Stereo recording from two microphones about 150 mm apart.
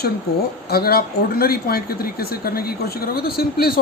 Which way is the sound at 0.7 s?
90° left.